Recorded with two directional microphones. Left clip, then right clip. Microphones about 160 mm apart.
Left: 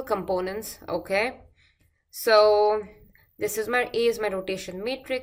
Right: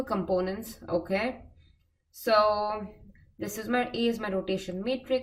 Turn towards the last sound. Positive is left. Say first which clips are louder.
# even
turn(degrees=20)  # may be behind; listen again after turning